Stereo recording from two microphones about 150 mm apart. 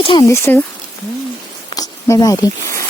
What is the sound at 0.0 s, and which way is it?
Speech, 35° left (ahead or behind).